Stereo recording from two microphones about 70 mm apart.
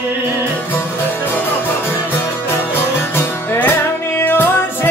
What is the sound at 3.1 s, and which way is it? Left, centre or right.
Music, left.